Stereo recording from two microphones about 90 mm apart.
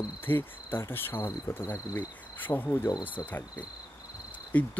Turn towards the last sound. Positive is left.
turn(degrees=15)  # may be behind; listen again after turning